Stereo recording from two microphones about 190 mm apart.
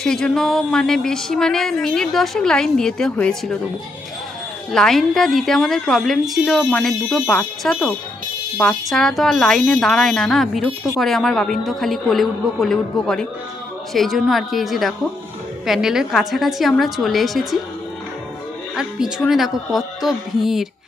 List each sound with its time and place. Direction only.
0.0 s speech: 5° left (ahead or behind)
4.7 s speech: centre (ahead or behind)
18.8 s speech: 5° right (ahead or behind)